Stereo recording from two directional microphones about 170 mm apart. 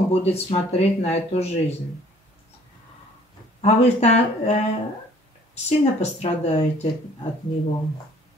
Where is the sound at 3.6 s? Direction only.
40° left (ahead or behind).